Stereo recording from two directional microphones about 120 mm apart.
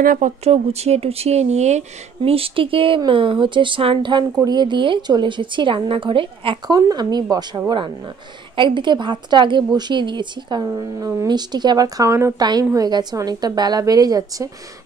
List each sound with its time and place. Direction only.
0.2 s a woman's voice: 60° right (ahead or behind); by 6.6 s 45° right (ahead or behind)
6.7 s a woman's voice: 35° right (ahead or behind)
12.4 s a woman's voice: 35° right (ahead or behind)